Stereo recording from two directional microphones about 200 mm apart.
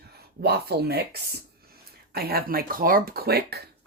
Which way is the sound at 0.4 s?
55° right (ahead or behind).